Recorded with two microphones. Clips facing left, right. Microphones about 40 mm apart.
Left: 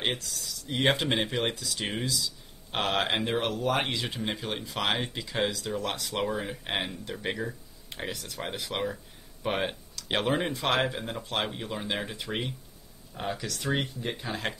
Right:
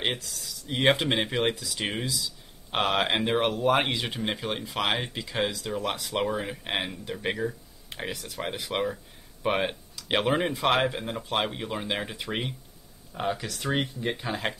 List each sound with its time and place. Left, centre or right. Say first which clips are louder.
0.7 s speech: right 3 dB; centre